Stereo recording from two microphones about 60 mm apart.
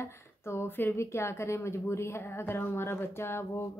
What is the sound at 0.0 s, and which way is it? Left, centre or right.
Speech, left.